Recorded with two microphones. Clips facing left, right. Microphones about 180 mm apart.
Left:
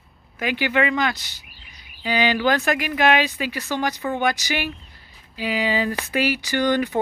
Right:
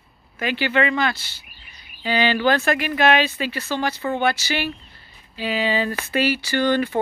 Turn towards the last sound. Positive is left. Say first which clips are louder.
# right 1 dB
turn(degrees=15)  # may be behind; listen again after turning